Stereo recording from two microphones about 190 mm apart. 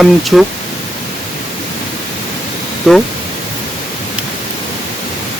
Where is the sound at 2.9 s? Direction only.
Centre (ahead or behind).